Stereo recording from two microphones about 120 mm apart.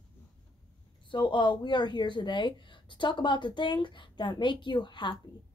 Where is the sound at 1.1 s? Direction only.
40° left (ahead or behind).